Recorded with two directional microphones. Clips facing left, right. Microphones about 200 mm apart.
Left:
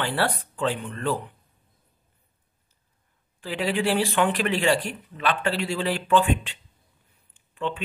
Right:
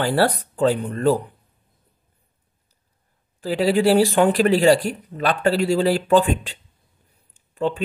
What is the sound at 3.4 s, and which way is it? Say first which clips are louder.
Speech: right 8 dB; 40° right (ahead or behind).